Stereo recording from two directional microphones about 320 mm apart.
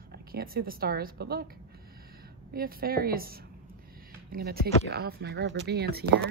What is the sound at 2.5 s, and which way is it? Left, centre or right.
A woman's voice, right.